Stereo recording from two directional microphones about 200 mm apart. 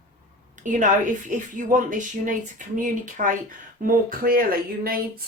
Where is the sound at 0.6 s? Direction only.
40° right (ahead or behind).